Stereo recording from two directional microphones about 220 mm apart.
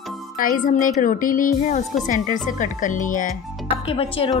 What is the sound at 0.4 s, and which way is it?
Speech, 35° left (ahead or behind).